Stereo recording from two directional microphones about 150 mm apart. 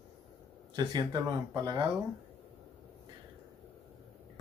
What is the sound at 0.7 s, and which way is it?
Speech, 30° right (ahead or behind).